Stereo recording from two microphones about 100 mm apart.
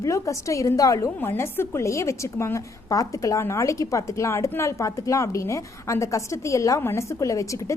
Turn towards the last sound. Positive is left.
turn(degrees=30)  # may be behind; listen again after turning